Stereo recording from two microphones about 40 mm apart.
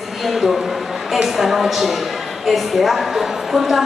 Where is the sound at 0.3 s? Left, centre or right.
Centre.